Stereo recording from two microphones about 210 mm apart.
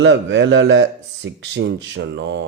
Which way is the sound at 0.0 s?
60° right (ahead or behind).